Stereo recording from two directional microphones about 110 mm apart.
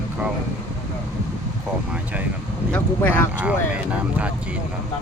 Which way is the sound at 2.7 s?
15° left (ahead or behind).